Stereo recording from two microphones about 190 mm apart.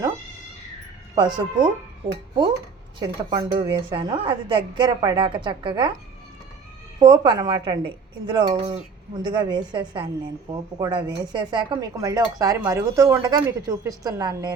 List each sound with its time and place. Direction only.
1.2 s speech: 25° right (ahead or behind)
3.0 s speech: 20° right (ahead or behind)
7.0 s speech: 20° right (ahead or behind)